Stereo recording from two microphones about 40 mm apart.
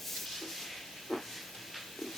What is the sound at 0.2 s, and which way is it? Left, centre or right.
Hiss, centre.